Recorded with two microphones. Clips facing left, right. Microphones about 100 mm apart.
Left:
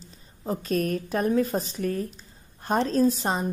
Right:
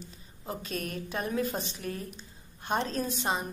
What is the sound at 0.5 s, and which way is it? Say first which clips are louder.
A woman's voice: left 10 dB; 40° left (ahead or behind).